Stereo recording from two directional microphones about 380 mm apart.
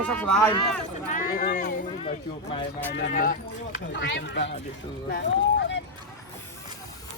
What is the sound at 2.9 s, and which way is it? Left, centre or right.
Speech, left.